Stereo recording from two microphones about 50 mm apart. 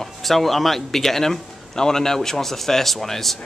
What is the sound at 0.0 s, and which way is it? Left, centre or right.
Speech, centre.